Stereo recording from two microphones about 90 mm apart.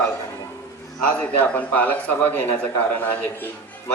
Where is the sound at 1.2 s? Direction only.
20° left (ahead or behind).